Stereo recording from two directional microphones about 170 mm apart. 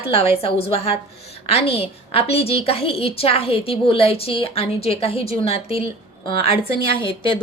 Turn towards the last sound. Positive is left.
turn(degrees=30)  # may be behind; listen again after turning